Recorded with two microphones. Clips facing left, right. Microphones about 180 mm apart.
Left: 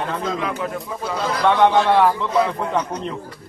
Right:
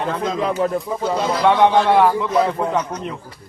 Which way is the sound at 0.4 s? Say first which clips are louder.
Right 6 dB; 35° right (ahead or behind).